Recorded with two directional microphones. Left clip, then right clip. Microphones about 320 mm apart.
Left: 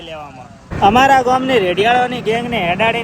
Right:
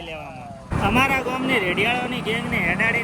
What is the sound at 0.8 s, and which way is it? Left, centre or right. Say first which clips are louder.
Speech: left 10 dB; centre.